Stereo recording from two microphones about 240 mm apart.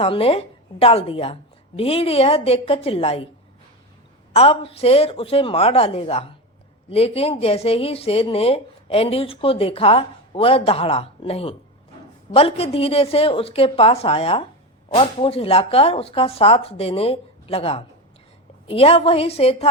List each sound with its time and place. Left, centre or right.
0.0 s speech: left
4.4 s speech: left